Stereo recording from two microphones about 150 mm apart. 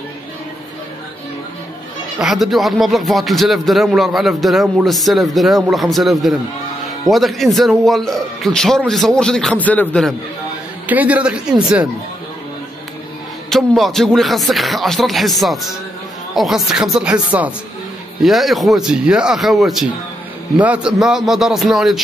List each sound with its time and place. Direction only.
2.1 s speech: centre (ahead or behind)
10.9 s a woman's voice: 10° right (ahead or behind)
13.5 s speech: centre (ahead or behind)